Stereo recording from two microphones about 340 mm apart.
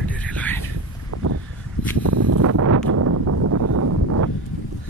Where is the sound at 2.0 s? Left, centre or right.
Right.